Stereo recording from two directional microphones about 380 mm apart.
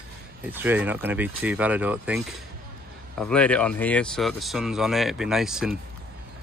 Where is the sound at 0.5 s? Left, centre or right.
Centre.